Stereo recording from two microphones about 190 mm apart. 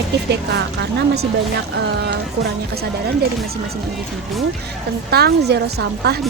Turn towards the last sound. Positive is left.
turn(degrees=-60)  # may be behind; listen again after turning